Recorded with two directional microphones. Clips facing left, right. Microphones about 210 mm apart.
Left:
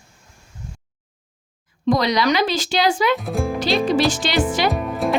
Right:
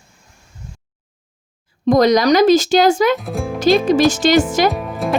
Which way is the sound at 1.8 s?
45° right (ahead or behind).